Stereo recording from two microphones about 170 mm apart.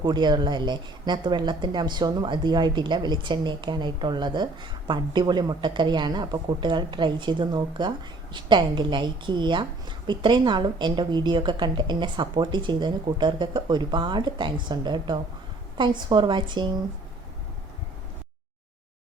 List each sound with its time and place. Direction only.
0.0 s a woman's voice: 25° right (ahead or behind)